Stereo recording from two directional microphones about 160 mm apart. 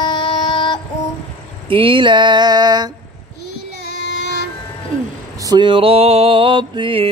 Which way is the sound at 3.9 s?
90° left.